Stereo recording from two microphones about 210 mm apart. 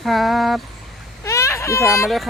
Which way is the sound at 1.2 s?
15° left (ahead or behind).